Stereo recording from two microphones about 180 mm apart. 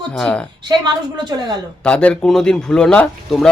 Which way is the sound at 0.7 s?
25° right (ahead or behind).